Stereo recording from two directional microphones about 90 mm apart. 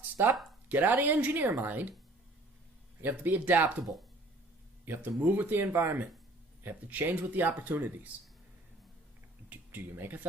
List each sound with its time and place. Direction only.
0.2 s speech: 25° right (ahead or behind)
3.0 s speech: 20° right (ahead or behind)
4.9 s speech: 20° right (ahead or behind)
9.5 s speech: 20° right (ahead or behind)